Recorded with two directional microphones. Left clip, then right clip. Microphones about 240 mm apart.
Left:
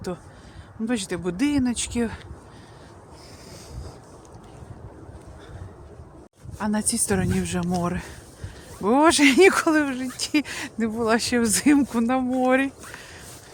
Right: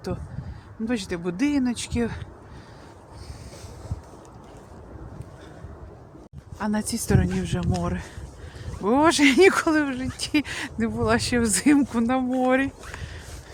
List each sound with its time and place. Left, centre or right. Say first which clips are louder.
0.9 s speech: left 1 dB; centre
6.6 s speech: left 2 dB; centre